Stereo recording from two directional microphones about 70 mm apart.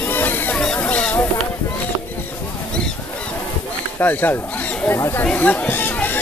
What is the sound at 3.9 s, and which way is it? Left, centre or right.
Speech, left.